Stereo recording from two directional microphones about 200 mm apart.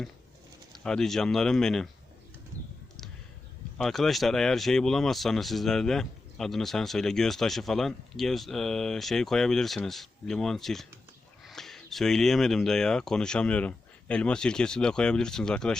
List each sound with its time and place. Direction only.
0.7 s speech: centre (ahead or behind)
3.8 s speech: centre (ahead or behind)